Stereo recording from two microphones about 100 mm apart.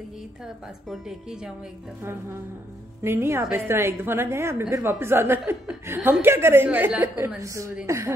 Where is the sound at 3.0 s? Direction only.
25° right (ahead or behind).